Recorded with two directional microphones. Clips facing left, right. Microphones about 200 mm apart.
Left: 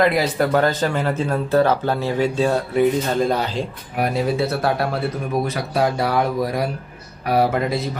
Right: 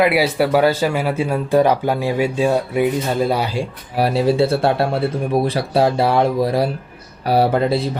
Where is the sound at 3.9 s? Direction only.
30° right (ahead or behind).